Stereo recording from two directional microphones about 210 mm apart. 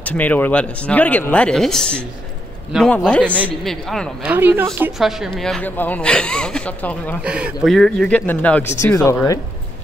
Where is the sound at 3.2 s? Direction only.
10° right (ahead or behind).